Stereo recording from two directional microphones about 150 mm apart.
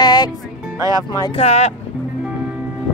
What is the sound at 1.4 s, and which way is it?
Speech, 45° left (ahead or behind).